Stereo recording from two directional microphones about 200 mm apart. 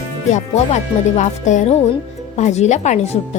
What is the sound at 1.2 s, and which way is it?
A woman's voice, 35° left (ahead or behind).